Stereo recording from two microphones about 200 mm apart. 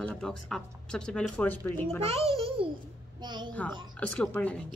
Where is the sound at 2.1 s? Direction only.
30° right (ahead or behind).